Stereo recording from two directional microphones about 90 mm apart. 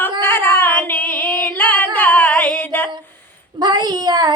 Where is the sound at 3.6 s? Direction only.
50° right (ahead or behind).